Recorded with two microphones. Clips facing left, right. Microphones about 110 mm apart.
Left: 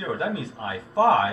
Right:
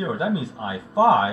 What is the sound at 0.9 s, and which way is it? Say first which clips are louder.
Speech: right 2 dB; 15° right (ahead or behind).